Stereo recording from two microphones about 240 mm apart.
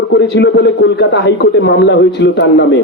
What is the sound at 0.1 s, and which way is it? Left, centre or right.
A man's voice, left.